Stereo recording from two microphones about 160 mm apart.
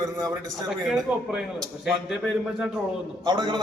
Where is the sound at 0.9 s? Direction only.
5° right (ahead or behind).